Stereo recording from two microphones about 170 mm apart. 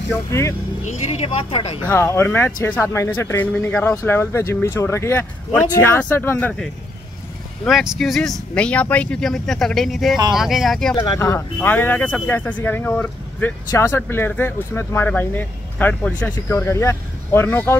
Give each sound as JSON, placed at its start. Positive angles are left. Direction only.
{"t": 0.1, "sound": "speech", "side_deg": 15}
{"t": 0.8, "sound": "speech", "side_deg": 40}
{"t": 1.9, "sound": "speech", "side_deg": 15}
{"t": 11.0, "sound": "speech", "side_deg": 20}